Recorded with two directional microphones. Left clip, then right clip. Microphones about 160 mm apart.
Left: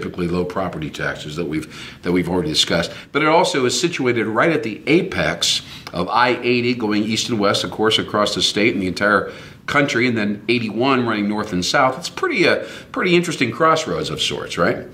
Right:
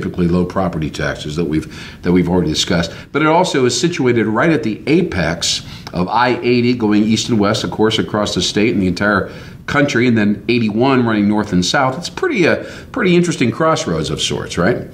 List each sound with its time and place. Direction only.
0.0 s speech: 15° left (ahead or behind)